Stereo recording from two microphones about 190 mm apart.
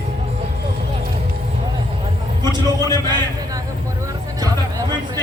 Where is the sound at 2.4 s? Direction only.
20° right (ahead or behind).